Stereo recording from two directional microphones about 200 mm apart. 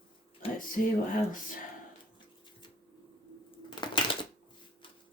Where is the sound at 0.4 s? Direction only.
30° left (ahead or behind).